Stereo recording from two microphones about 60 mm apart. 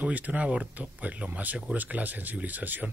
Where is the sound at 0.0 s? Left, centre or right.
Right.